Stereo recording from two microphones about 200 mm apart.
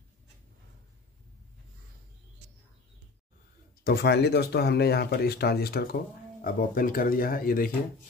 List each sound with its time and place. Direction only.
3.8 s speech: 55° left (ahead or behind)